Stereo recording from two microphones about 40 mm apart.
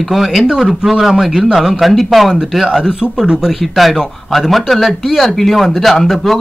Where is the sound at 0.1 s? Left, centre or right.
Centre.